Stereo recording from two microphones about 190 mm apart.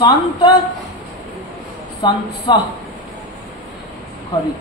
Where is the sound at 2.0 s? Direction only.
20° left (ahead or behind).